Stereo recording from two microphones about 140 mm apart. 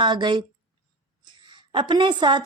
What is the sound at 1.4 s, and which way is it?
A woman's voice, 35° right (ahead or behind).